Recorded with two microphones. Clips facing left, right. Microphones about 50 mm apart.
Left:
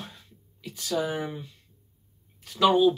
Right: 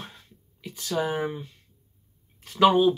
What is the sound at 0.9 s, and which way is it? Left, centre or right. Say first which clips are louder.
Speech: right 2 dB; right.